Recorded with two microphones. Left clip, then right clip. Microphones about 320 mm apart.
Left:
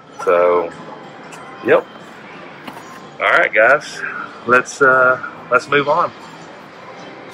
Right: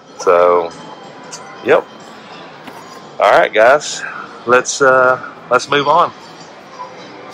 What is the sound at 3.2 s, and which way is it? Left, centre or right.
Speech, centre.